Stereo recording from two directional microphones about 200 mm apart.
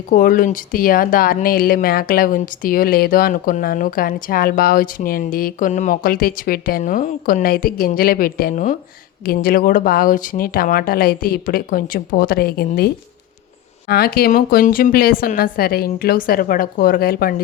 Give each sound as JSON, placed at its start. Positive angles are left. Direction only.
{"t": 0.1, "sound": "speech", "side_deg": 45}